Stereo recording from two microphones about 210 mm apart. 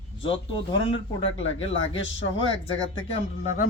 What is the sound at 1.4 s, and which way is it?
Speech, 65° left (ahead or behind).